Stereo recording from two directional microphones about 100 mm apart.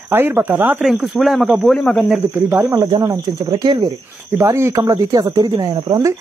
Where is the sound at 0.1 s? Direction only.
20° right (ahead or behind).